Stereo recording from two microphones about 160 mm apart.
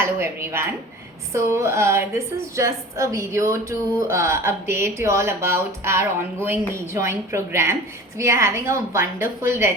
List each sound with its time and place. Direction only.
0.0 s a woman's voice: 15° right (ahead or behind)